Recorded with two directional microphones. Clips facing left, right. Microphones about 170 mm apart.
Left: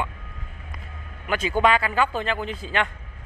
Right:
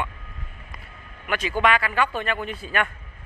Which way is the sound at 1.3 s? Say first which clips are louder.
Left 2 dB; 25° left (ahead or behind).